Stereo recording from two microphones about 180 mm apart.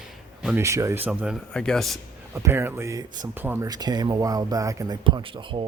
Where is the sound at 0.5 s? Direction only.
15° right (ahead or behind).